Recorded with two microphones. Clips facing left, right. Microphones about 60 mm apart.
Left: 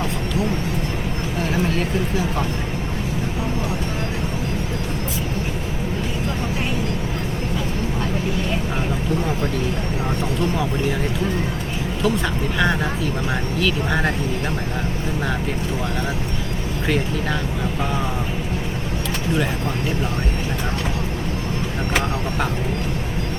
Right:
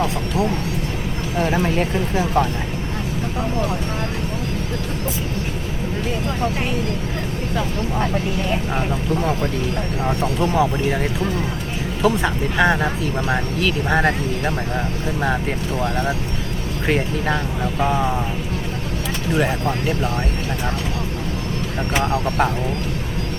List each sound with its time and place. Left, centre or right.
10.2 s speech: right
12.0 s speech: right
16.8 s speech: right